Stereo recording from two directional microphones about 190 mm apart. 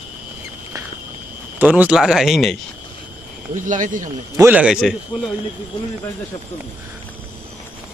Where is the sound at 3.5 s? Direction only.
40° right (ahead or behind).